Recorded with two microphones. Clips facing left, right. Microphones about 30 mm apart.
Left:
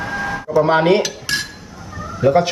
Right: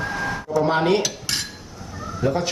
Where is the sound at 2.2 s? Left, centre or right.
Left.